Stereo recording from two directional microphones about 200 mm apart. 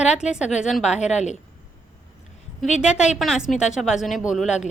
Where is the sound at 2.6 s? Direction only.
5° right (ahead or behind).